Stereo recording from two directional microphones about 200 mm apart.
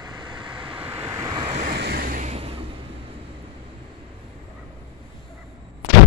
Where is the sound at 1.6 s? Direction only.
50° right (ahead or behind); by 2.6 s 30° right (ahead or behind).